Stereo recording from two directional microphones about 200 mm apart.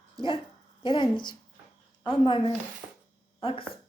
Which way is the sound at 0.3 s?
25° left (ahead or behind).